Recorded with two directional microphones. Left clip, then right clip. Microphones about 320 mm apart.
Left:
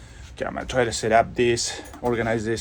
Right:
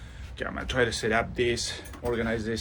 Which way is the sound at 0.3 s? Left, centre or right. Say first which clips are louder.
Left 4 dB; centre.